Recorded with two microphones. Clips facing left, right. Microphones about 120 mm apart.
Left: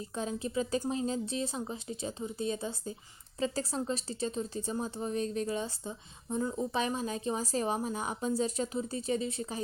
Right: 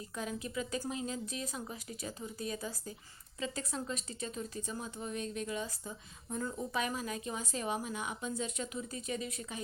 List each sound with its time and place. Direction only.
0.2 s a woman's voice: 30° left (ahead or behind)